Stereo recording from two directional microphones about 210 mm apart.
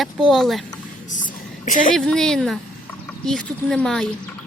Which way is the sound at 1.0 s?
35° left (ahead or behind).